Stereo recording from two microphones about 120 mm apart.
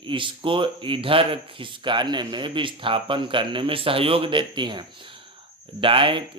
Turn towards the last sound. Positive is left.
turn(degrees=-45)  # may be behind; listen again after turning